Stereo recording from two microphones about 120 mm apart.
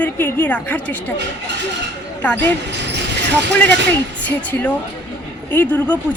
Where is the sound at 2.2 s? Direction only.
15° left (ahead or behind).